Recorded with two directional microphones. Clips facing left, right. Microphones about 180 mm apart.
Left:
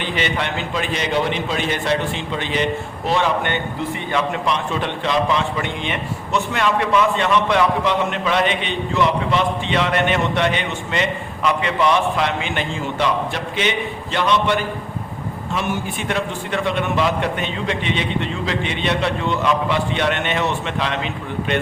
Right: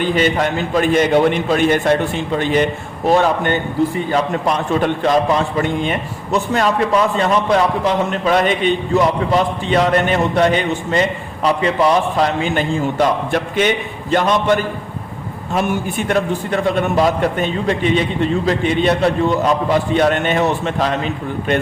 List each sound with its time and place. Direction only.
0.0 s a man's voice: 45° right (ahead or behind)